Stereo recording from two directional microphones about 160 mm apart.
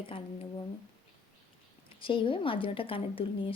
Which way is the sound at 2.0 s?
35° left (ahead or behind).